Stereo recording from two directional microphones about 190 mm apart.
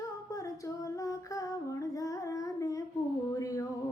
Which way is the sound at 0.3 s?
15° left (ahead or behind).